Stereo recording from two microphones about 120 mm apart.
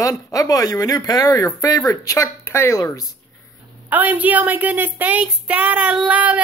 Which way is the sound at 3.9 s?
15° right (ahead or behind).